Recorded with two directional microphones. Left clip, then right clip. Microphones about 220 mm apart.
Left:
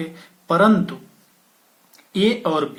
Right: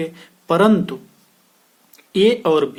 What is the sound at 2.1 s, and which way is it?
Speech, 40° right (ahead or behind).